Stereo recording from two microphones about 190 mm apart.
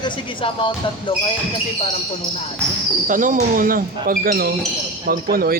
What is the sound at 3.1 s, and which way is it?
Speech, 45° right (ahead or behind).